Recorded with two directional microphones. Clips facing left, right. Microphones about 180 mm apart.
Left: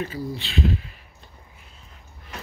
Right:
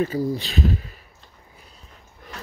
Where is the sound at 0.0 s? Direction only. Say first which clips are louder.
Right 7 dB; 40° right (ahead or behind).